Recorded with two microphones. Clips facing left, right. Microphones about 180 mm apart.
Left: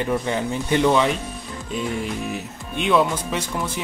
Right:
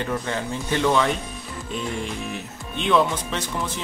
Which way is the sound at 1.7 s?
5° left (ahead or behind).